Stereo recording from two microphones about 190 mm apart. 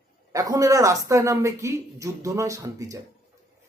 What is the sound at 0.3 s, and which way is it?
Speech, 15° right (ahead or behind).